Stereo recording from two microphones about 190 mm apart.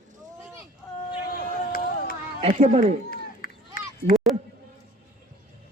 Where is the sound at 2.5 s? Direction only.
40° right (ahead or behind).